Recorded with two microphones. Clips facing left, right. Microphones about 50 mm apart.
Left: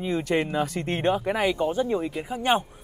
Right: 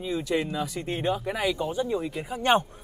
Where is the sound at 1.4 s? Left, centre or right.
Left.